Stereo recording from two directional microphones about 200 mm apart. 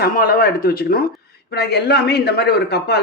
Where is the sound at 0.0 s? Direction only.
45° left (ahead or behind).